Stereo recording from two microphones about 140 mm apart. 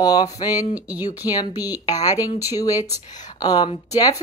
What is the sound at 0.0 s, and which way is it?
Speech, 30° left (ahead or behind).